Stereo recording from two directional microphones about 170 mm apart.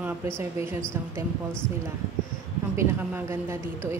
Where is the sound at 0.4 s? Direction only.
15° right (ahead or behind).